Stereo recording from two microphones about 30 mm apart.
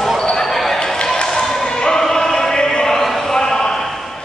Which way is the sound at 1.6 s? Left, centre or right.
Left.